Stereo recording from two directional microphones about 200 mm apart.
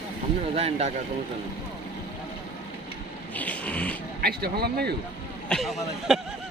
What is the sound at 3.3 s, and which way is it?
Vehicle, 5° left (ahead or behind).